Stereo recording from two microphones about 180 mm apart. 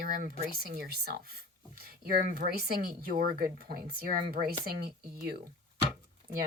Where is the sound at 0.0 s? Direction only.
50° right (ahead or behind).